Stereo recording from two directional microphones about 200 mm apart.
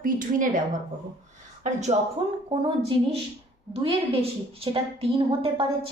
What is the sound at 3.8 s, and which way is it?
A woman's voice, 30° right (ahead or behind).